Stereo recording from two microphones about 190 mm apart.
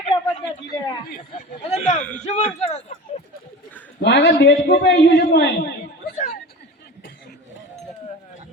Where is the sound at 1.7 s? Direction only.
40° left (ahead or behind).